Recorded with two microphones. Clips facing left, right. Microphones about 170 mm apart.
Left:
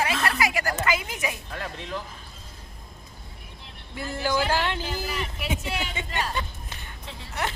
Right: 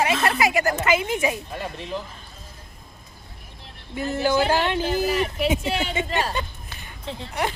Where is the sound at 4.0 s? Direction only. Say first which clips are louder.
Right 5 dB; 20° right (ahead or behind).